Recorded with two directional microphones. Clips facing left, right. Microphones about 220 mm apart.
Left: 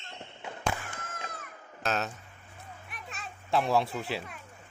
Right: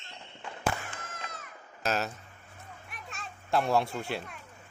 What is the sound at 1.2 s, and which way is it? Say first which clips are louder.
Music: left 2 dB; 50° left (ahead or behind).